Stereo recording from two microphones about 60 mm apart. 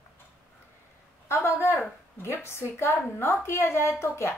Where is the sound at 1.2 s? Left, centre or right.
Left.